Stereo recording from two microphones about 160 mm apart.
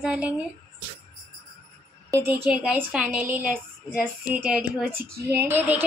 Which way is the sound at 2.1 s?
15° right (ahead or behind).